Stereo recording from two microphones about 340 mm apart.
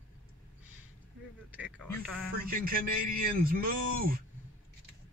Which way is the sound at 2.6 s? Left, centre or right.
Right.